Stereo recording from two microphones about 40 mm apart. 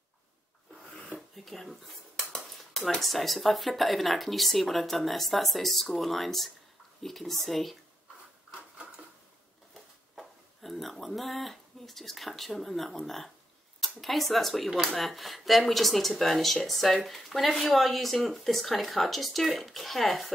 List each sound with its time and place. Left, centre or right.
1.3 s dishes: centre
3.0 s speech: centre
10.1 s speech: centre